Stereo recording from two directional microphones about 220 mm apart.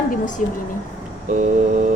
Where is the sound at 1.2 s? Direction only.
35° right (ahead or behind).